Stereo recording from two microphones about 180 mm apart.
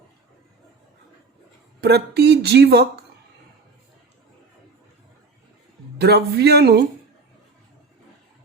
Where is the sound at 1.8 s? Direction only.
65° right (ahead or behind).